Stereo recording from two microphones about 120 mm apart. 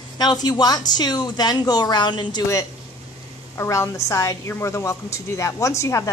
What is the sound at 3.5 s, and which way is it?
A woman's voice, 25° left (ahead or behind).